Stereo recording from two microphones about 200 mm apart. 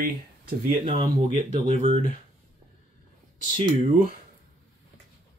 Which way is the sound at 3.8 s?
45° right (ahead or behind).